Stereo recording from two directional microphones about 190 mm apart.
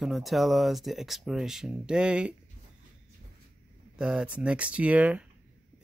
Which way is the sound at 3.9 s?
5° right (ahead or behind).